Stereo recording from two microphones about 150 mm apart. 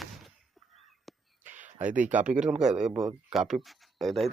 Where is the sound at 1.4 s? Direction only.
55° right (ahead or behind).